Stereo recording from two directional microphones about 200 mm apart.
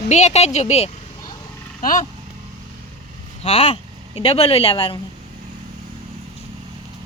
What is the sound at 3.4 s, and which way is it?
Speech, 30° left (ahead or behind).